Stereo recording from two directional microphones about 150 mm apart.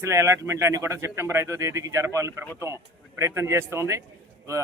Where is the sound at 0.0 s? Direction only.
20° right (ahead or behind).